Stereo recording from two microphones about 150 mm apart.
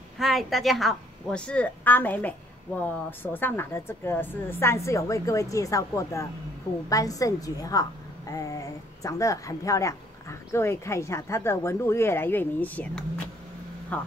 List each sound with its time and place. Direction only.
0.2 s a woman's voice: centre (ahead or behind)